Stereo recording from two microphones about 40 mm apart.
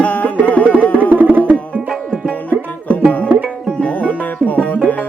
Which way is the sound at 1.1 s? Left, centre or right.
Right.